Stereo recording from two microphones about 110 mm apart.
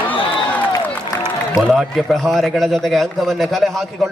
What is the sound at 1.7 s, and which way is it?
A man's voice, 5° right (ahead or behind).